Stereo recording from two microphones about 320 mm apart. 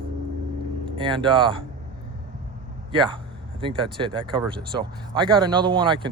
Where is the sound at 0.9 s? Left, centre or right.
Centre.